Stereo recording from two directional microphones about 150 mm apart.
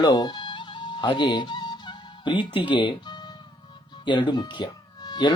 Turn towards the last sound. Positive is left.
turn(degrees=30)  # may be behind; listen again after turning